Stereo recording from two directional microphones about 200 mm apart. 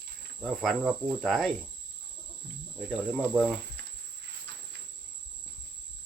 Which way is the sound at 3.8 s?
55° right (ahead or behind).